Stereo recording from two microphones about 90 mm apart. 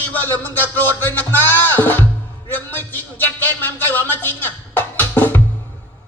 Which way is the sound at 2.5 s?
20° left (ahead or behind).